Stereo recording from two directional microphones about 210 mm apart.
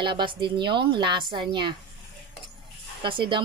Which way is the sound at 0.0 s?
25° right (ahead or behind).